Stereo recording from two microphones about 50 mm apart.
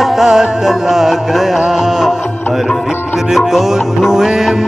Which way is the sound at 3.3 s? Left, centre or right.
Centre.